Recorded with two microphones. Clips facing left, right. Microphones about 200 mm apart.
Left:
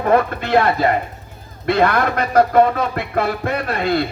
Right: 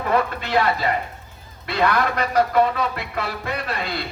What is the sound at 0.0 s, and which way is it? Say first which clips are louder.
Speech: left 5 dB; 50° left (ahead or behind).